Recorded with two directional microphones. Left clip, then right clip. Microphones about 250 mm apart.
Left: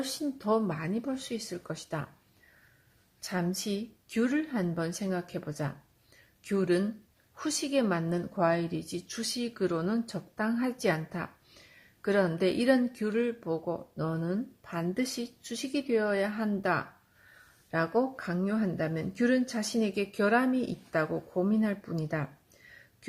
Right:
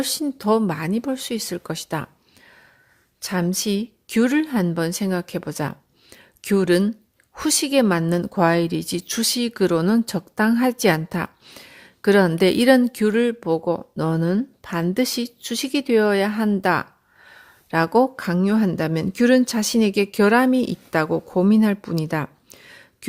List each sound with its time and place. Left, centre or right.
0.0 s speech: right
3.2 s a woman's voice: right